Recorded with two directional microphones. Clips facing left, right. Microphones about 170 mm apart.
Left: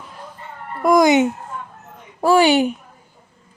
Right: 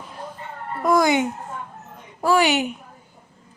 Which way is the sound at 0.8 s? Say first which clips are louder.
Left 5 dB; 15° left (ahead or behind).